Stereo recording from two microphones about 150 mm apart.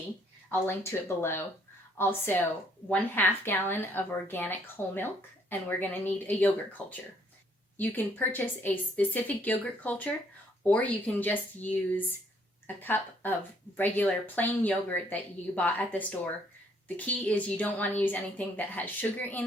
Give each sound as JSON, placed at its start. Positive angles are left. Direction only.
{"t": 0.7, "sound": "a woman's voice", "side_deg": 15}